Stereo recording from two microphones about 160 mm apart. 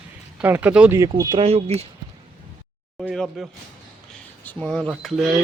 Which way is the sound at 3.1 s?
Centre (ahead or behind).